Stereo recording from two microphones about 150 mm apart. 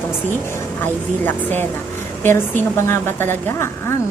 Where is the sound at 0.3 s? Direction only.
15° left (ahead or behind).